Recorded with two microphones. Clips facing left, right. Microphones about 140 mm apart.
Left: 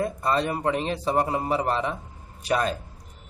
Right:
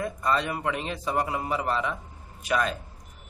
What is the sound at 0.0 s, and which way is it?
Speech, 35° left (ahead or behind).